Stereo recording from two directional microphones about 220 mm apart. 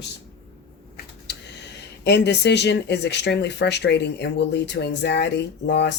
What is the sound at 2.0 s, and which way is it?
Speech, 50° left (ahead or behind).